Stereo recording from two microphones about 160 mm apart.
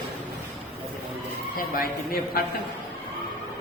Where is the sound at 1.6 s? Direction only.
65° left (ahead or behind).